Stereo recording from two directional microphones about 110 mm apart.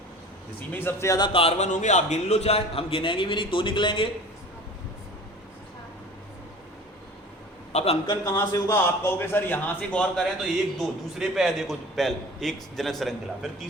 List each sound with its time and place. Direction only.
0.7 s a man's voice: 20° left (ahead or behind)
1.3 s a man's voice: 65° left (ahead or behind)
7.7 s a man's voice: 80° left
8.0 s speech: 45° left (ahead or behind)
8.3 s a man's voice: 30° left (ahead or behind); by 10.2 s 10° left (ahead or behind)
10.4 s a man's voice: centre (ahead or behind)